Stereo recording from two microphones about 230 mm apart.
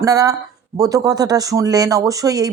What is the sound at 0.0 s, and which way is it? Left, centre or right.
A woman's voice, centre.